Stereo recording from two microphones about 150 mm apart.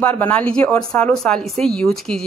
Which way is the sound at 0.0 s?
10° left (ahead or behind).